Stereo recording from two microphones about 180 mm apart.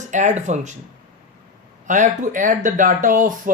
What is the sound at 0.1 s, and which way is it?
Speech, 40° right (ahead or behind).